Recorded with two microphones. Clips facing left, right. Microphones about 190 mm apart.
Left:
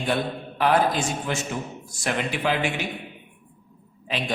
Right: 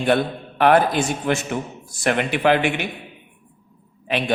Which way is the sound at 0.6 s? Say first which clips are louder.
Right 5 dB; 60° right (ahead or behind).